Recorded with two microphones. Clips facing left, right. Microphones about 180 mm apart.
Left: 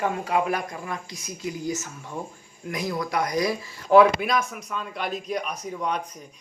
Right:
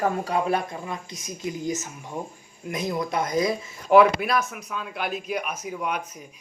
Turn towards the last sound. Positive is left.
turn(degrees=-5)  # may be behind; listen again after turning